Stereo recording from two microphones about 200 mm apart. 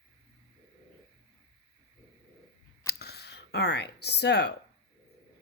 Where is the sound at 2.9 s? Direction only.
55° left (ahead or behind).